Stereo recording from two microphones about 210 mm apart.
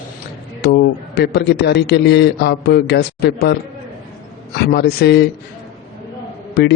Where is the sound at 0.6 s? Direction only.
50° left (ahead or behind).